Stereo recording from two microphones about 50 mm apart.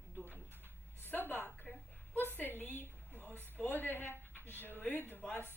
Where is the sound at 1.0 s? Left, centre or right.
Left.